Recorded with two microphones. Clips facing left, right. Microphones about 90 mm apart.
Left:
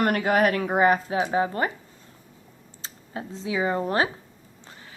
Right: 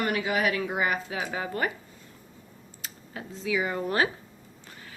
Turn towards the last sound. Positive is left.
turn(degrees=30)  # may be behind; listen again after turning